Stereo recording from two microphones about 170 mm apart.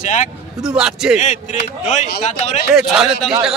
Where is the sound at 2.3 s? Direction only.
40° left (ahead or behind).